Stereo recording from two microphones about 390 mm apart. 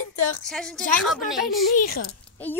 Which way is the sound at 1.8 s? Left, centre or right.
Left.